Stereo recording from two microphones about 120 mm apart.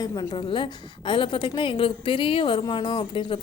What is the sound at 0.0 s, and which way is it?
A woman's voice, 30° left (ahead or behind).